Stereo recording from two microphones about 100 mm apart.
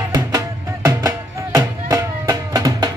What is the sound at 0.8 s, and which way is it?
Music, 35° right (ahead or behind).